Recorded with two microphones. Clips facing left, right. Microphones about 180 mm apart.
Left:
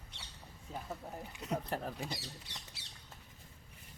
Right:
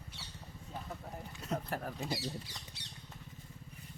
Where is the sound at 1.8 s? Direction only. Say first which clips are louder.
Right 3 dB; 5° left (ahead or behind).